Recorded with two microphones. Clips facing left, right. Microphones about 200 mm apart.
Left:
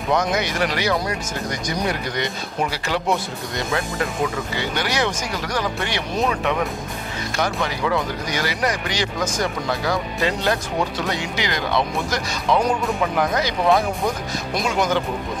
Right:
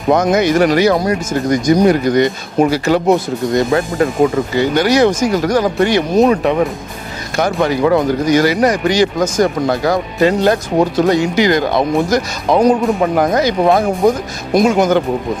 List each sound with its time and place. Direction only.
0.1 s speech: 45° right (ahead or behind)